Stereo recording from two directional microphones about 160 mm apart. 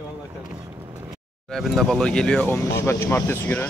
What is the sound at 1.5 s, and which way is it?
Speech, centre (ahead or behind).